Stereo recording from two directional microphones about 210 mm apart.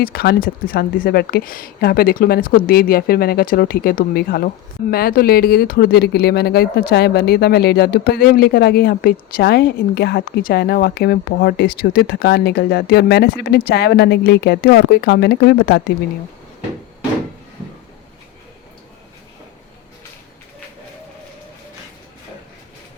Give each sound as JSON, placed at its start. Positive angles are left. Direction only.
{"t": 0.0, "sound": "speech", "side_deg": 45}